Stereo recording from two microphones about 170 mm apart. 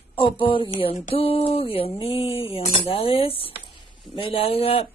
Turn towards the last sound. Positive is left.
turn(degrees=35)  # may be behind; listen again after turning